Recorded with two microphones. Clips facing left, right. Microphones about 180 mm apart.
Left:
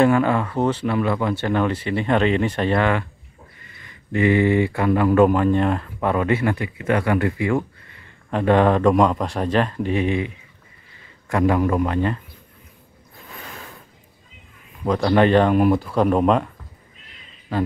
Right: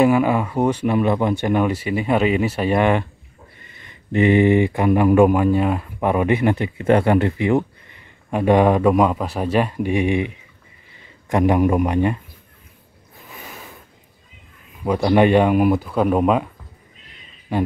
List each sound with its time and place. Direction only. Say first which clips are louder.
0.0 s speech: right 1 dB; 10° right (ahead or behind)
13.3 s a sound: even; 5° right (ahead or behind)
14.9 s speech: right 1 dB; 10° right (ahead or behind)